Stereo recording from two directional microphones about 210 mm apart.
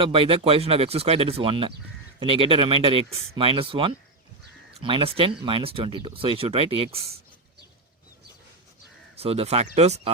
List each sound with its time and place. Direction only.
0.0 s speech: 25° right (ahead or behind)
9.1 s speech: 30° right (ahead or behind)